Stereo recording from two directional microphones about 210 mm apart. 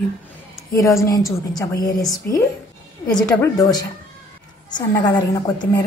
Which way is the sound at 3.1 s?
20° left (ahead or behind).